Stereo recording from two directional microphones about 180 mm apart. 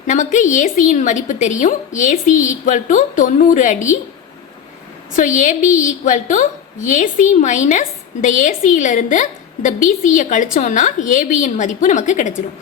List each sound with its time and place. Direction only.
0.1 s a woman's voice: 45° left (ahead or behind)
5.1 s a woman's voice: 45° left (ahead or behind)